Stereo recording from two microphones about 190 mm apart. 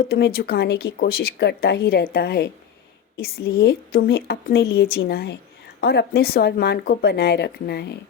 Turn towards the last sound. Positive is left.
turn(degrees=60)  # may be behind; listen again after turning